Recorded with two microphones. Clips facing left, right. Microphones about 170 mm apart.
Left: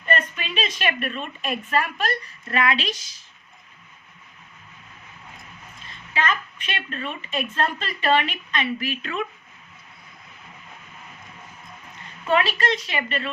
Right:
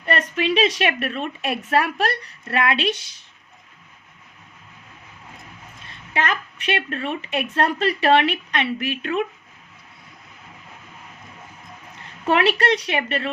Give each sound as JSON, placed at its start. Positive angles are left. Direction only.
{"t": 0.0, "sound": "a woman's voice", "side_deg": -75}
{"t": 6.1, "sound": "a woman's voice", "side_deg": -70}
{"t": 12.3, "sound": "a woman's voice", "side_deg": -70}